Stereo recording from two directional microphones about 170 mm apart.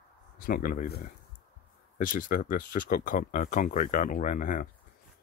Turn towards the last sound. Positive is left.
turn(degrees=50)  # may be behind; listen again after turning